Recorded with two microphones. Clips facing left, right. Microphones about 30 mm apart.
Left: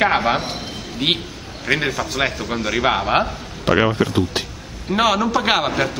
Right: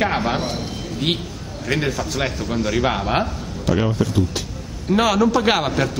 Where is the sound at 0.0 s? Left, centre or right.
Centre.